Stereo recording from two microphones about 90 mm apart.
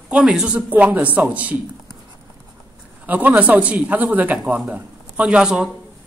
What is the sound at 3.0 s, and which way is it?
A man's voice, 20° right (ahead or behind).